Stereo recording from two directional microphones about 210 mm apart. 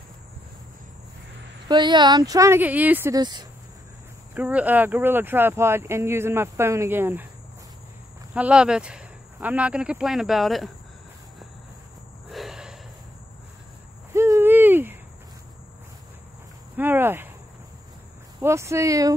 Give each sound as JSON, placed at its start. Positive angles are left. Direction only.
{"t": 1.7, "sound": "speech", "side_deg": -20}
{"t": 4.3, "sound": "speech", "side_deg": -5}
{"t": 8.4, "sound": "speech", "side_deg": -5}
{"t": 12.3, "sound": "a sound", "side_deg": 0}
{"t": 14.1, "sound": "hoot", "side_deg": -15}
{"t": 16.7, "sound": "cricket", "side_deg": -10}
{"t": 18.4, "sound": "speech", "side_deg": -15}